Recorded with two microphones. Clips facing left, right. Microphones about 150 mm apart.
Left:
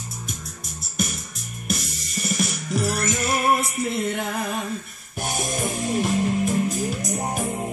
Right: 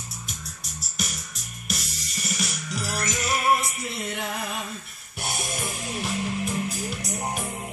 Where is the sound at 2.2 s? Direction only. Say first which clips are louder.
Left 6 dB; 50° left (ahead or behind).